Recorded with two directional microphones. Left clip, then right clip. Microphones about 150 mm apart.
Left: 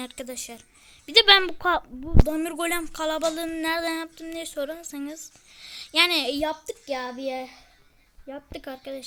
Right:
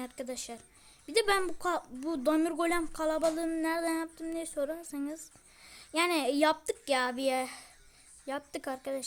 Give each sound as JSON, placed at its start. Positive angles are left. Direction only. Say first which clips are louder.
{"t": 0.0, "sound": "speech", "louder": "left 4 dB", "side_deg": 5}
{"t": 7.3, "sound": "speech", "louder": "even", "side_deg": -50}
{"t": 8.3, "sound": "speech", "louder": "even", "side_deg": -10}